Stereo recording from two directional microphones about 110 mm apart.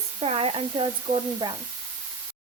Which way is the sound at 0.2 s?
60° right (ahead or behind).